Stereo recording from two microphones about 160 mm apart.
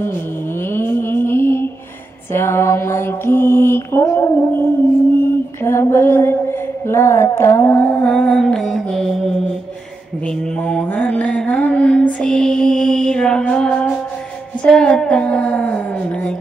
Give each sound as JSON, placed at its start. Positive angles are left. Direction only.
{"t": 0.7, "sound": "mantra", "side_deg": 15}
{"t": 10.2, "sound": "mantra", "side_deg": 5}